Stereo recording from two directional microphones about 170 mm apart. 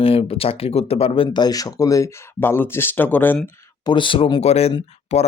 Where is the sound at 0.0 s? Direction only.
35° left (ahead or behind); by 3.5 s 10° left (ahead or behind).